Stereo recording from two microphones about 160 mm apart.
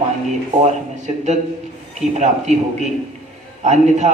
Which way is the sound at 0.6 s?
45° right (ahead or behind).